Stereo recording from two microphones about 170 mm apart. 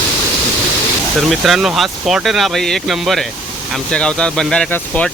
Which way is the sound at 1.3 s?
Centre (ahead or behind).